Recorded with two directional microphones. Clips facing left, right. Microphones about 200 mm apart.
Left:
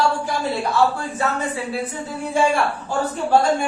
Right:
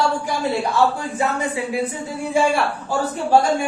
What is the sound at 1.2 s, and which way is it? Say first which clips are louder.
Speech: right 1 dB; 15° right (ahead or behind).